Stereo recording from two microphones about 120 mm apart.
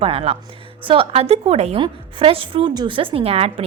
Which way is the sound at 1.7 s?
45° right (ahead or behind).